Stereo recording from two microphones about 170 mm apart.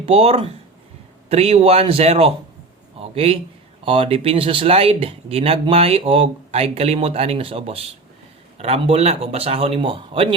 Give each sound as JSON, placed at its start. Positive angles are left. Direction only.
{"t": 0.0, "sound": "a man's voice", "side_deg": -35}